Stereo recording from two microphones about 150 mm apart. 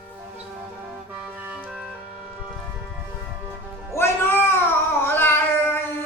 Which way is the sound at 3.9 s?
15° left (ahead or behind).